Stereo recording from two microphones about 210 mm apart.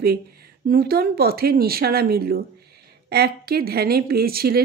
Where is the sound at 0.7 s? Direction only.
45° right (ahead or behind).